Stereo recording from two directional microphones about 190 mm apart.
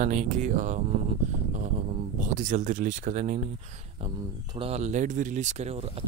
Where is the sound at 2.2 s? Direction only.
40° right (ahead or behind).